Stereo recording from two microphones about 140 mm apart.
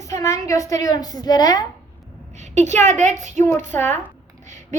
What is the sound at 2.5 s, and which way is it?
Speech, 55° right (ahead or behind).